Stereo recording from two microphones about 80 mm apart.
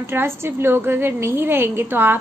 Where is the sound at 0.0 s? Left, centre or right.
Right.